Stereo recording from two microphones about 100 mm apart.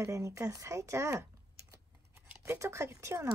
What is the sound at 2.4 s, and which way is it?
Speech, 30° right (ahead or behind).